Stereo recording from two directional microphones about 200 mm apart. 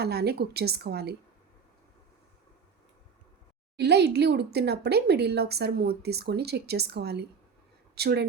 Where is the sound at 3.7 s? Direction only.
55° right (ahead or behind).